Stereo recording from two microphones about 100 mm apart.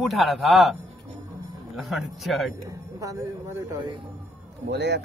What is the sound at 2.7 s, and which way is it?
Speech, 35° right (ahead or behind).